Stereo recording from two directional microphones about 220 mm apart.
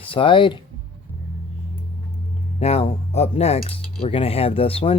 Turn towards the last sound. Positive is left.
turn(degrees=25)  # may be behind; listen again after turning